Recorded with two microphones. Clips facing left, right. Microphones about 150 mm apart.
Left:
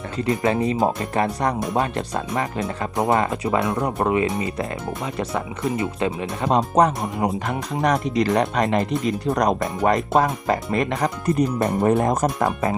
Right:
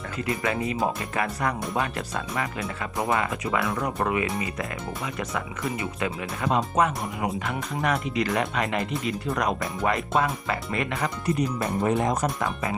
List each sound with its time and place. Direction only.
0.3 s speech: 30° left (ahead or behind)